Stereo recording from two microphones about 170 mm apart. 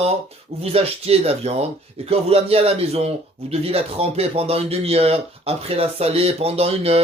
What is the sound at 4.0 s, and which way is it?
Speech, 35° right (ahead or behind).